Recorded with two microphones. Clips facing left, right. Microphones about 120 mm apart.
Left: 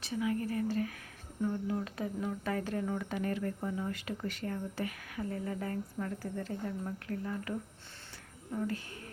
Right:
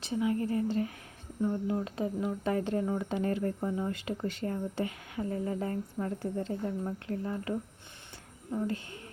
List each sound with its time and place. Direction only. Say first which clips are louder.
0.0 s speech: right 3 dB; 25° right (ahead or behind)
8.5 s speech: right 3 dB; 25° right (ahead or behind)